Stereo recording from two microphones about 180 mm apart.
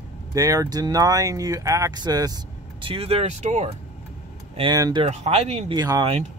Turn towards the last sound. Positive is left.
turn(degrees=-25)  # may be behind; listen again after turning